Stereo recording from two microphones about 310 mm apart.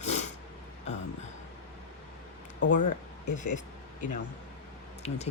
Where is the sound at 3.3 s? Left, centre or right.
Left.